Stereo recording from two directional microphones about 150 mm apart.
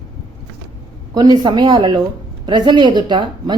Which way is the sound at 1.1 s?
30° right (ahead or behind).